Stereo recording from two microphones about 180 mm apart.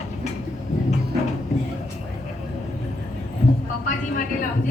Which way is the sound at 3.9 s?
50° left (ahead or behind).